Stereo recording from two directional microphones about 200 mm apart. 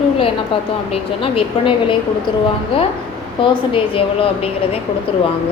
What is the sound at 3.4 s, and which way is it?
A woman's voice, 25° left (ahead or behind).